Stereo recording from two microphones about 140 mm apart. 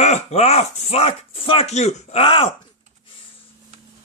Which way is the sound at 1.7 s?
55° left (ahead or behind).